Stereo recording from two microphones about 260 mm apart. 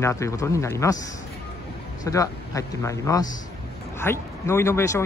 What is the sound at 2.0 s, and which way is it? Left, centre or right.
Speech, centre.